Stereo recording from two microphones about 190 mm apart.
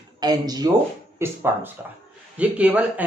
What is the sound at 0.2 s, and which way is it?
Speech, 20° right (ahead or behind).